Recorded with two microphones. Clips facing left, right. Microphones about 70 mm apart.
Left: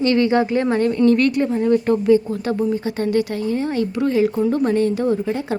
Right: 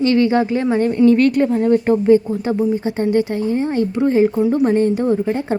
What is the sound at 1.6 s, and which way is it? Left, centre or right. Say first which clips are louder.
Speech: right 2 dB; right.